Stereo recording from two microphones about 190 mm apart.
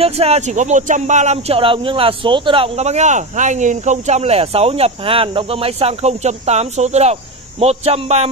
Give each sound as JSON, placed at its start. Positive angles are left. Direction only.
{"t": 0.0, "sound": "speech", "side_deg": -35}